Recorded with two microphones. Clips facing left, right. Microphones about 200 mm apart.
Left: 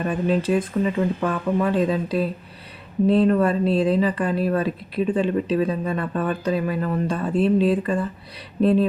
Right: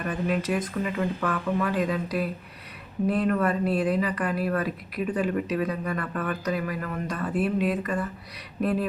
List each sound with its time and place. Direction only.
0.0 s speech: 25° left (ahead or behind)